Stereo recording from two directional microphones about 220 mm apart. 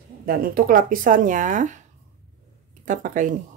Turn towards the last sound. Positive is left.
turn(degrees=-35)  # may be behind; listen again after turning